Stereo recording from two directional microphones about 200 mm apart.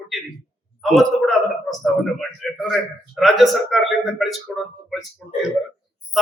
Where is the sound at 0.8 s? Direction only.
Centre (ahead or behind).